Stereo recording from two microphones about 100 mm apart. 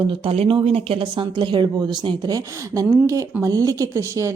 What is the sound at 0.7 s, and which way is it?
A woman's voice, 65° right (ahead or behind).